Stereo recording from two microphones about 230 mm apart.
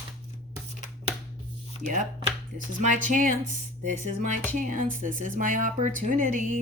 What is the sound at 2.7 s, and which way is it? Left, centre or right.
Speech, right.